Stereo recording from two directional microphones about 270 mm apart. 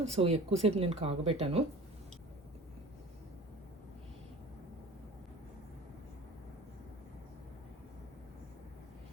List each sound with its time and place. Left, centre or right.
0.0 s speech: right